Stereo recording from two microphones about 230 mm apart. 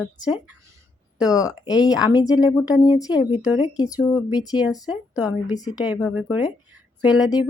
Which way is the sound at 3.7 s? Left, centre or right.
Centre.